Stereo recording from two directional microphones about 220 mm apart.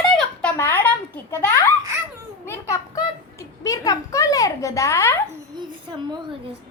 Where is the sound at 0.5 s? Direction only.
10° left (ahead or behind).